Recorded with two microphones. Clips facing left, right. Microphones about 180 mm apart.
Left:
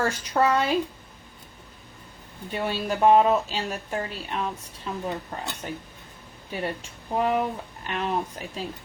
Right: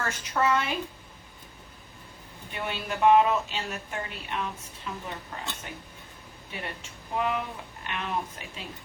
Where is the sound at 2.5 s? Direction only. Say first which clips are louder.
Left 6 dB; 35° left (ahead or behind).